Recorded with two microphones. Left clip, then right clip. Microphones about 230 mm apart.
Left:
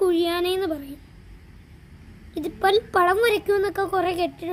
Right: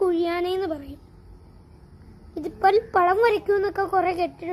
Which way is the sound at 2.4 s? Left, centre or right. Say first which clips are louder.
Right 1 dB; left.